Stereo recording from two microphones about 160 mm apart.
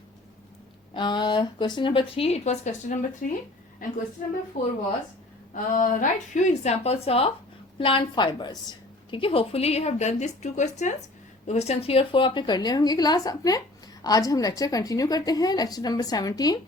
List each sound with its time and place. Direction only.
0.9 s a woman's voice: 30° left (ahead or behind); by 3.2 s 50° left (ahead or behind)
4.6 s speech: 50° left (ahead or behind)
5.7 s a woman's voice: 55° left (ahead or behind); by 16.6 s 25° left (ahead or behind)